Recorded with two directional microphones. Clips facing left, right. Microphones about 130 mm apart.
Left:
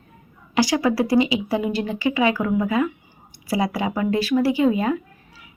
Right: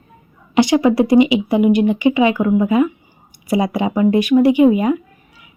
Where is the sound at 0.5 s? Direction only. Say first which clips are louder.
Right 6 dB; 20° right (ahead or behind).